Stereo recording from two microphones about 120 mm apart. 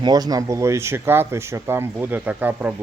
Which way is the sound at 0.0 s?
35° right (ahead or behind).